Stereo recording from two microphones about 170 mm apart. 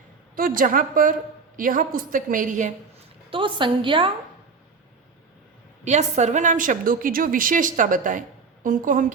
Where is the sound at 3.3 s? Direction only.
30° right (ahead or behind).